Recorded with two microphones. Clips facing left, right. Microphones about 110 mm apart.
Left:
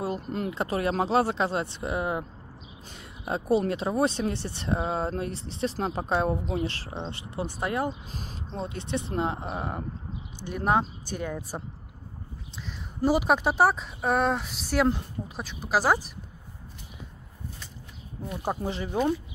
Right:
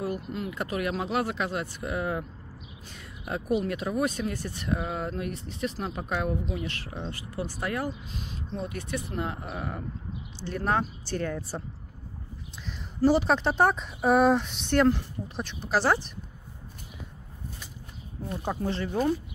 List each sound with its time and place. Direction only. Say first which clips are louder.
0.2 s speech: left 3 dB; 45° left (ahead or behind)
0.5 s speech: left 3 dB; 30° left (ahead or behind)
8.1 s speech: right 1 dB; 40° left (ahead or behind)
10.4 s speech: left 2 dB; 15° left (ahead or behind)
13.0 s speech: right 1 dB; 10° left (ahead or behind)
18.5 s speech: even; 15° left (ahead or behind)
18.9 s speech: left 1 dB; 30° left (ahead or behind)